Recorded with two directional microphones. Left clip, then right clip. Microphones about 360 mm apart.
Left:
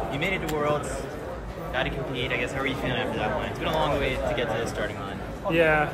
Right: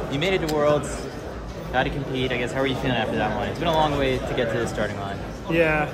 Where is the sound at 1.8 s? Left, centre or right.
Right.